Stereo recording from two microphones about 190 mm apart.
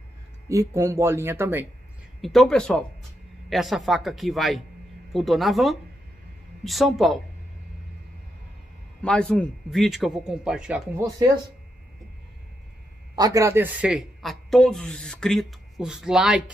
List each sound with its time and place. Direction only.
0.5 s speech: 15° right (ahead or behind)
2.2 s speech: 5° left (ahead or behind)
9.0 s speech: 5° left (ahead or behind)
13.1 s speech: 20° right (ahead or behind)